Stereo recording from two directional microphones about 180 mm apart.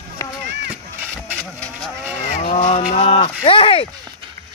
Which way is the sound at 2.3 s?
40° left (ahead or behind).